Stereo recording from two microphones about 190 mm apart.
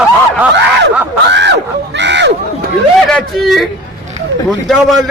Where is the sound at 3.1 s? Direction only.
5° left (ahead or behind).